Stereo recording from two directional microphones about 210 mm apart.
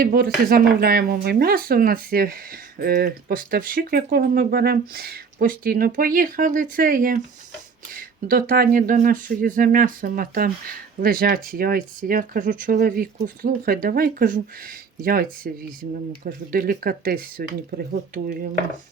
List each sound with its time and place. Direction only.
0.0 s speech: 45° right (ahead or behind)